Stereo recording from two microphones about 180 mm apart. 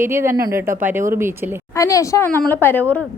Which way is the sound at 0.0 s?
15° right (ahead or behind).